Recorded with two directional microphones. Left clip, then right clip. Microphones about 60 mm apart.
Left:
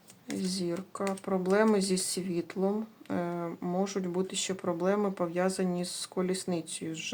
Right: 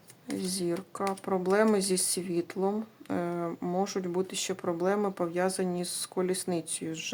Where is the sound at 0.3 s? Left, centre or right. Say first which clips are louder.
Right 2 dB; right.